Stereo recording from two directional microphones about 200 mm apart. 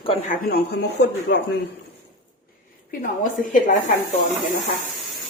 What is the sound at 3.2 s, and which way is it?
Speech, 40° left (ahead or behind).